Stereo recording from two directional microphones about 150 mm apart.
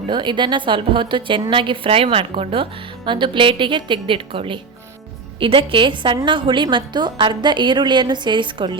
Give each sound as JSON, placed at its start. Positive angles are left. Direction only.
{"t": 0.1, "sound": "a woman's voice", "side_deg": -30}